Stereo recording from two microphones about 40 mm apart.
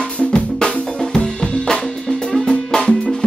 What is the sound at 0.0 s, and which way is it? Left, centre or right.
Drum, left.